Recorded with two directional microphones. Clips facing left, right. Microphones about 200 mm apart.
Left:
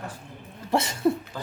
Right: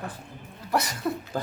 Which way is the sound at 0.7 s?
25° left (ahead or behind).